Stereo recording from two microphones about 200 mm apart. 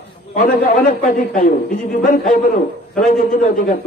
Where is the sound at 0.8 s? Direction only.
45° left (ahead or behind).